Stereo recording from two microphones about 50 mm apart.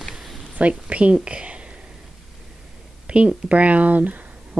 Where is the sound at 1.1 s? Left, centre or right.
Right.